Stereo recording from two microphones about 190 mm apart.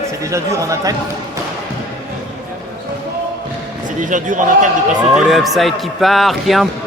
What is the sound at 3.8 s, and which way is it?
Speech, 40° right (ahead or behind).